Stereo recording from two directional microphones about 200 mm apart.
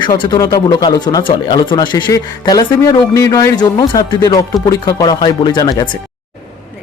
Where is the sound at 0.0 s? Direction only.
20° left (ahead or behind).